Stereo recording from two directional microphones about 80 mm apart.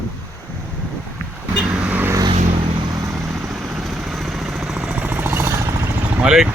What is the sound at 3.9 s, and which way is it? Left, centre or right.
Vehicle, centre.